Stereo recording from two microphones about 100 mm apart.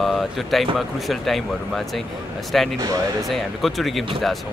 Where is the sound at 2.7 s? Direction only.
35° right (ahead or behind).